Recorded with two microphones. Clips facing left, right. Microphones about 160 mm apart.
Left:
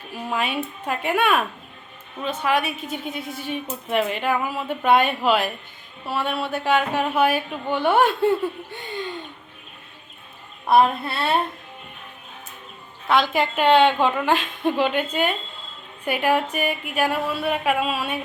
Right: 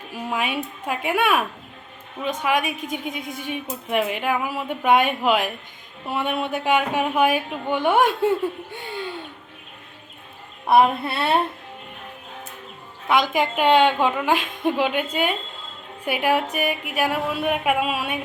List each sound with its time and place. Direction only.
0.1 s a woman's voice: 10° right (ahead or behind)
10.7 s a child's voice: 20° right (ahead or behind)
13.1 s a woman's voice: 15° right (ahead or behind)